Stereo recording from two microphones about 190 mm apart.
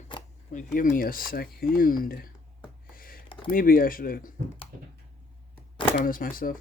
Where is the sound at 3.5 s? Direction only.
50° left (ahead or behind).